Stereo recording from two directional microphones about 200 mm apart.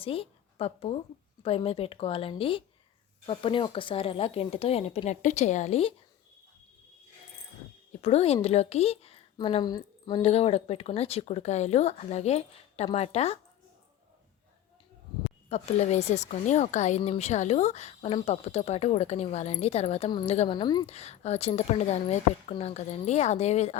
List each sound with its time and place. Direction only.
0.0 s a woman's voice: 30° left (ahead or behind)
8.0 s speech: 30° left (ahead or behind)
15.4 s speech: 35° left (ahead or behind)
20.8 s speech: 35° left (ahead or behind)